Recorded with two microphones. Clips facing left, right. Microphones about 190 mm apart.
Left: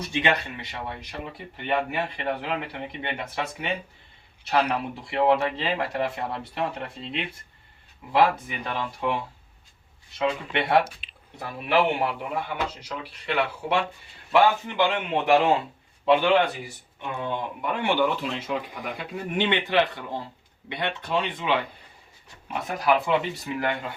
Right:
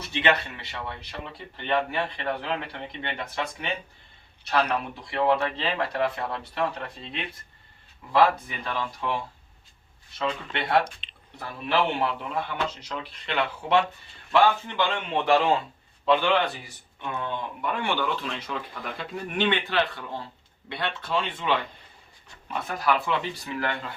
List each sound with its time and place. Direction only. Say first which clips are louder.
0.1 s speech: right 1 dB; 15° left (ahead or behind)
8.1 s speech: even; 20° left (ahead or behind)
11.0 s a sound: left 1 dB; 5° left (ahead or behind)
11.3 s speech: left 2 dB; 15° left (ahead or behind)